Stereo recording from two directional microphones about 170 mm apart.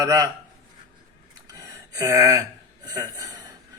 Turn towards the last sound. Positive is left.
turn(degrees=-20)  # may be behind; listen again after turning